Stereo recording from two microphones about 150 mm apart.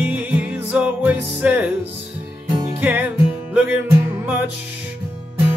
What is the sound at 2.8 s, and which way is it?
Music, 10° right (ahead or behind).